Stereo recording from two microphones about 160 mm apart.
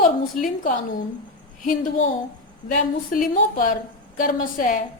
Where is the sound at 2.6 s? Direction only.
55° left (ahead or behind).